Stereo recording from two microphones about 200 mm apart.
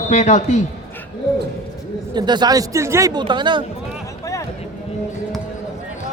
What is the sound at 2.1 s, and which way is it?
A man's voice, 20° right (ahead or behind).